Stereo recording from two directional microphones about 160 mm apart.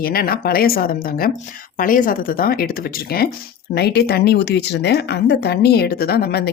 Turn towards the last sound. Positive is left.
turn(degrees=80)